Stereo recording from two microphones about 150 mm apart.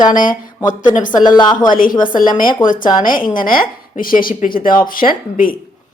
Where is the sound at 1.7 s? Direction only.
65° left (ahead or behind).